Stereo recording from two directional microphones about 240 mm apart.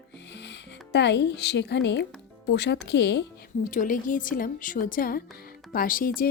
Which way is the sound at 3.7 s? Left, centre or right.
Left.